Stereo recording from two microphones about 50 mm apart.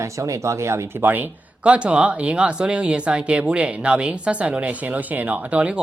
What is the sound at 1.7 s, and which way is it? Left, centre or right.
Speech, right.